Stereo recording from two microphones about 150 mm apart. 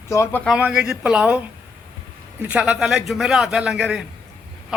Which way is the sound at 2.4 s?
5° right (ahead or behind).